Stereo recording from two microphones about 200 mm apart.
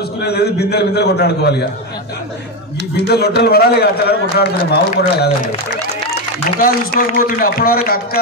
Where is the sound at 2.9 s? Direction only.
55° left (ahead or behind).